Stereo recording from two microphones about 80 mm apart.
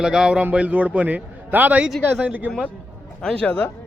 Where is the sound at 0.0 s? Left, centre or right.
Centre.